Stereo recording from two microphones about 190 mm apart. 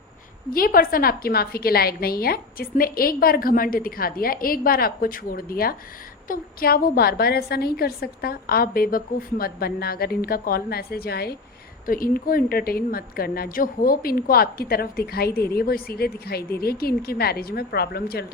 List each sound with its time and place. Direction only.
0.5 s a woman's voice: 50° left (ahead or behind)